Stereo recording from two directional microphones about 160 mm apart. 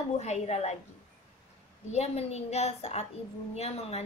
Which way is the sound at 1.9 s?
40° left (ahead or behind).